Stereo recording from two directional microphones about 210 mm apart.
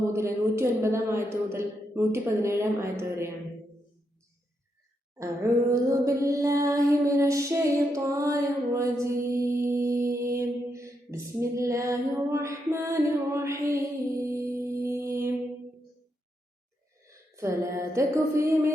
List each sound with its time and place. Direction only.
0.1 s a woman's voice: 10° right (ahead or behind)
5.1 s a woman's voice: 15° right (ahead or behind)
9.2 s mantra: 15° right (ahead or behind)
17.1 s a sound: 15° right (ahead or behind)